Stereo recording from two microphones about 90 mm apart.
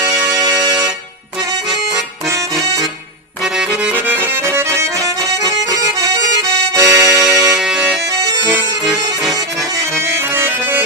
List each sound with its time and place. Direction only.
0.3 s music: 40° right (ahead or behind)
3.4 s accordion: 5° right (ahead or behind); by 7.0 s 35° right (ahead or behind)
7.1 s music: 10° right (ahead or behind)
10.0 s accordion: 30° right (ahead or behind)